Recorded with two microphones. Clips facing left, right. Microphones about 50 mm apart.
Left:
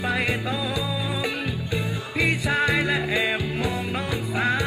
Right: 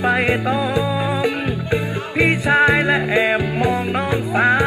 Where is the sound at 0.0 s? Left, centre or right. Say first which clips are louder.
Right 8 dB; right.